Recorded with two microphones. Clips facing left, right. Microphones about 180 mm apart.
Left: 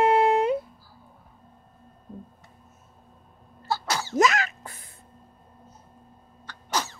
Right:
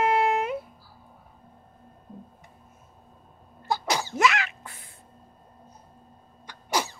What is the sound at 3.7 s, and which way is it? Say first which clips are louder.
Sneeze: right 1 dB; 15° right (ahead or behind).